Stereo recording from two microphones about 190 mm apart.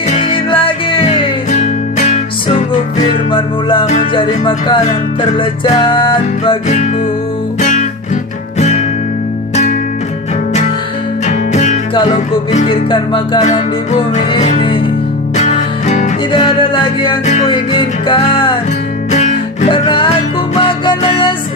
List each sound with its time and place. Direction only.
0.1 s music: 30° left (ahead or behind)
11.3 s music: 40° left (ahead or behind)
13.4 s music: 40° left (ahead or behind)
19.7 s music: 25° left (ahead or behind)